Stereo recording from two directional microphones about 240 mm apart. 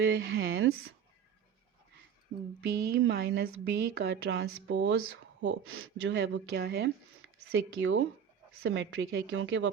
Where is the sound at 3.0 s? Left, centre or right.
Right.